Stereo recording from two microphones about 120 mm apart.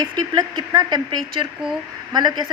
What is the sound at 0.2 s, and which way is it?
Speech, 35° right (ahead or behind).